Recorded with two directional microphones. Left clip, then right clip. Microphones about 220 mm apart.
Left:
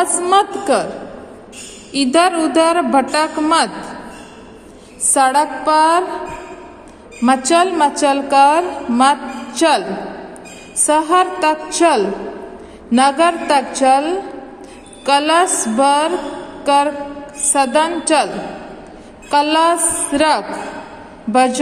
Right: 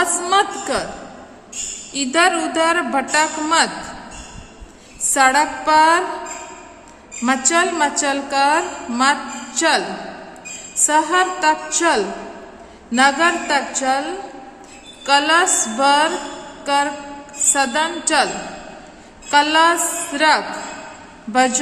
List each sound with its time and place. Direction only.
0.0 s a woman's voice: 10° left (ahead or behind)
1.9 s a woman's voice: 15° left (ahead or behind)
5.1 s a woman's voice: 10° left (ahead or behind)
7.2 s a woman's voice: 10° left (ahead or behind)
16.6 s a sound: 15° left (ahead or behind)
17.6 s a woman's voice: 15° left (ahead or behind)
19.3 s a woman's voice: 15° left (ahead or behind)
19.8 s a woman's voice: centre (ahead or behind)
20.1 s a woman's voice: 15° left (ahead or behind)